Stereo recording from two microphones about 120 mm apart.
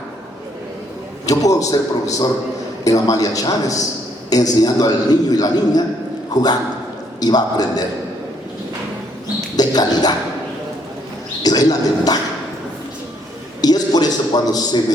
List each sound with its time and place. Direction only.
1.3 s a man's voice: 30° left (ahead or behind)
2.8 s a man's voice: 30° left (ahead or behind)
9.6 s a man's voice: 35° left (ahead or behind)
11.4 s a man's voice: 35° left (ahead or behind)
13.6 s a man's voice: 35° left (ahead or behind)